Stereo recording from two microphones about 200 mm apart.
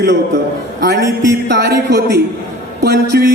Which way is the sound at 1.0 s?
15° right (ahead or behind).